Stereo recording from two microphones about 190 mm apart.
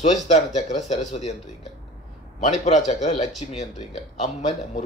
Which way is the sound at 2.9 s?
35° left (ahead or behind).